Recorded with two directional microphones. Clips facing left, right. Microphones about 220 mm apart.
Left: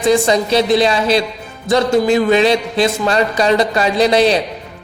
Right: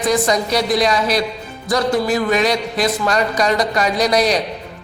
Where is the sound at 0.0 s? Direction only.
25° left (ahead or behind).